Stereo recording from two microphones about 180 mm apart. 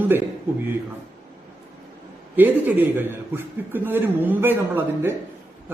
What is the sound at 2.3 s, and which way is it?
A man's voice, 10° right (ahead or behind).